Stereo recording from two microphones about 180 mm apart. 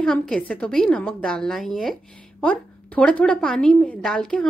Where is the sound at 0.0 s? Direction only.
5° left (ahead or behind).